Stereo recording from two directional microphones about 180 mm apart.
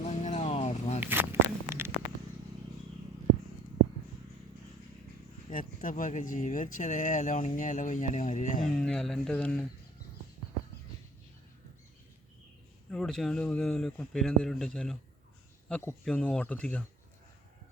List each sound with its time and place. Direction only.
0.0 s music: 40° left (ahead or behind)
0.9 s a sound: 10° right (ahead or behind)
5.5 s speech: 50° left (ahead or behind)
8.6 s speech: 5° left (ahead or behind)
12.9 s speech: 5° left (ahead or behind)
15.7 s speech: 15° left (ahead or behind)